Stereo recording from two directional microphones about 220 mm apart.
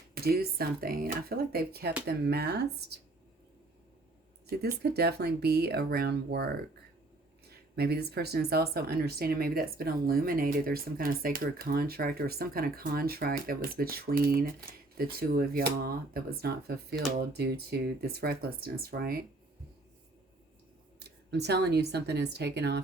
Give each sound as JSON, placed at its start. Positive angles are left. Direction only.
{"t": 0.1, "sound": "speech", "side_deg": -45}
{"t": 4.8, "sound": "speech", "side_deg": -45}
{"t": 7.8, "sound": "speech", "side_deg": -45}
{"t": 21.0, "sound": "speech", "side_deg": -50}